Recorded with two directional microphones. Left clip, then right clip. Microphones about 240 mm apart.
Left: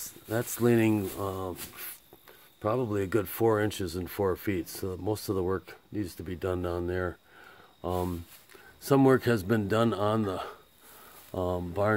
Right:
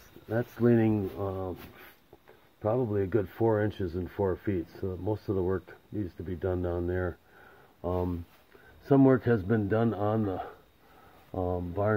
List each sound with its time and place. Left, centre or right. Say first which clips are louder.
0.3 s speech: even; left
2.6 s speech: right 1 dB; left